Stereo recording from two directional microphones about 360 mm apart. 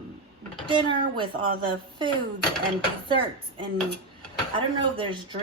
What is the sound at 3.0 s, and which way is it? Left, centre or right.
A woman's voice, centre.